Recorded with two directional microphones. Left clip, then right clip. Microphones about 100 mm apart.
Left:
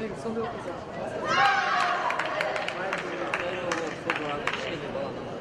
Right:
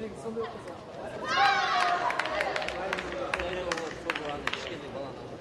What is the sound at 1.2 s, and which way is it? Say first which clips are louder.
Run: left 2 dB; 20° left (ahead or behind).